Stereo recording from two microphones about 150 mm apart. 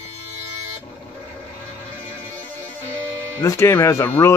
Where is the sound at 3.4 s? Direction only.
15° left (ahead or behind).